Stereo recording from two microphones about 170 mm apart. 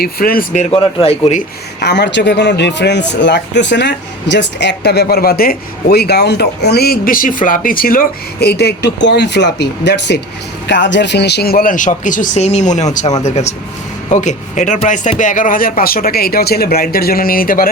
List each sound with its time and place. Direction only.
0.0 s speech: 60° left (ahead or behind)
0.5 s speech: 45° left (ahead or behind)
0.8 s speech: 30° left (ahead or behind)
1.8 s a man's voice: 90° left; by 17.7 s 55° left (ahead or behind)